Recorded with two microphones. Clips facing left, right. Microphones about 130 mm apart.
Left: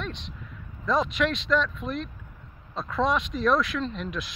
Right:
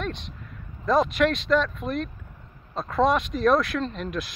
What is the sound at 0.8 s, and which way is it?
Speech, 50° right (ahead or behind).